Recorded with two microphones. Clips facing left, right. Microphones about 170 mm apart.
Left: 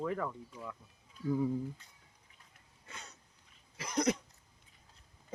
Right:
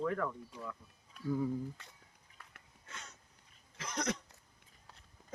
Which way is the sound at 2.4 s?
75° right (ahead or behind).